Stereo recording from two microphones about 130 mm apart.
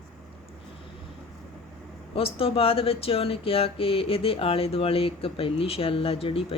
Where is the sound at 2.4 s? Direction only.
45° left (ahead or behind).